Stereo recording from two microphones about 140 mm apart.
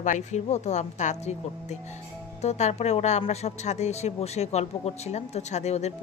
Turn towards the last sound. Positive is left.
turn(degrees=50)  # may be behind; listen again after turning